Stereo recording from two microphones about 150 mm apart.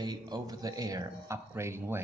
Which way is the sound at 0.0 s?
25° right (ahead or behind).